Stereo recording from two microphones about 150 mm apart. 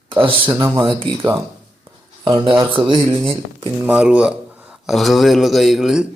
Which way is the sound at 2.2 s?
30° right (ahead or behind).